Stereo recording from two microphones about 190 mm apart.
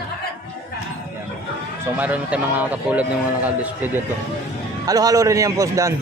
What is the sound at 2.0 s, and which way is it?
Speech, 10° right (ahead or behind).